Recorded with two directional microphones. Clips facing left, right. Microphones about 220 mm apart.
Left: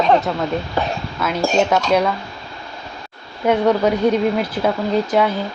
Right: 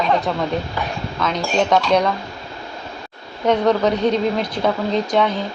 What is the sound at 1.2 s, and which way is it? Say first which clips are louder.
Speech: even; 5° left (ahead or behind).